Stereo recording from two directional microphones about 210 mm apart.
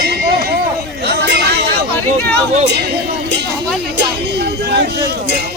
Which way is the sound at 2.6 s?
55° right (ahead or behind).